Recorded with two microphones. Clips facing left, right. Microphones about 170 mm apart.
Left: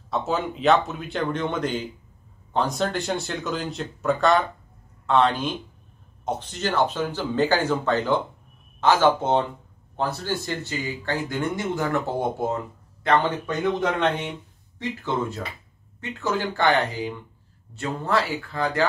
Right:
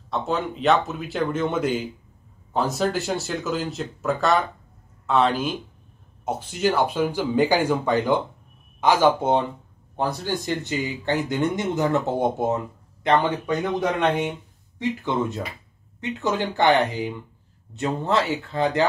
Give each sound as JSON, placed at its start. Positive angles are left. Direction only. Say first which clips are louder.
{"t": 0.1, "sound": "speech", "louder": "even", "side_deg": 0}